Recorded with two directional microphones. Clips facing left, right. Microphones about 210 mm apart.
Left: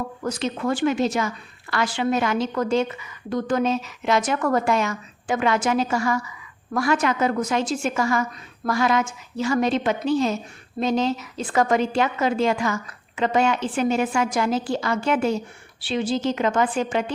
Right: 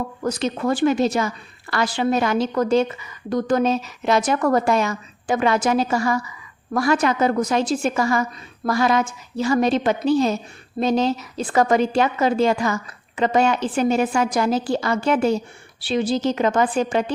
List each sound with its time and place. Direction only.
0.3 s a woman's voice: 40° right (ahead or behind)